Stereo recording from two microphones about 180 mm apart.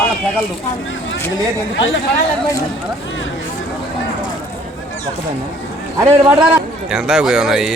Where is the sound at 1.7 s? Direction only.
90° left.